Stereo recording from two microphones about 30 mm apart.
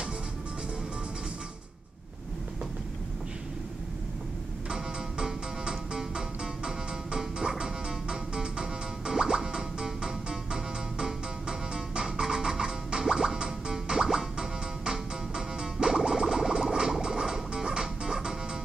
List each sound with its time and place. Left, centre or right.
5.2 s music: right
16.0 s a sound: right
17.0 s frog: right